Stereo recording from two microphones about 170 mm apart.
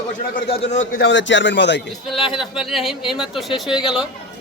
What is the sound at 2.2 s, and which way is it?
Speech, centre (ahead or behind).